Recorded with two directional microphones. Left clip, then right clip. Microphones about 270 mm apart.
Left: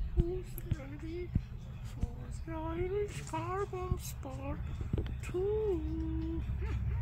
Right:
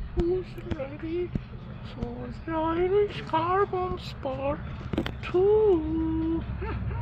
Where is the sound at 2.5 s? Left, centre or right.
Centre.